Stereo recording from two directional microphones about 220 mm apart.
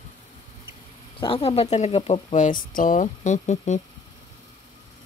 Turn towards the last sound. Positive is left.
turn(degrees=35)  # may be behind; listen again after turning